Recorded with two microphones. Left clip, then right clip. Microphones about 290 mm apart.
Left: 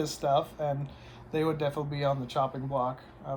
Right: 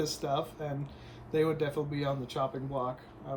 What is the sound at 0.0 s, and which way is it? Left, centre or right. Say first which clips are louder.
Speech: left 5 dB; centre.